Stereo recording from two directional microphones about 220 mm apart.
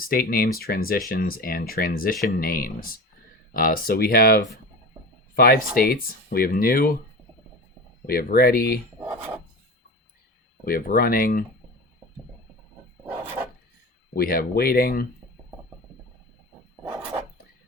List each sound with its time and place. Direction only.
0.0 s speech: 40° left (ahead or behind)
8.0 s speech: 40° left (ahead or behind)
9.0 s a sound: 10° right (ahead or behind)
10.7 s speech: 40° left (ahead or behind)
14.1 s speech: 40° left (ahead or behind)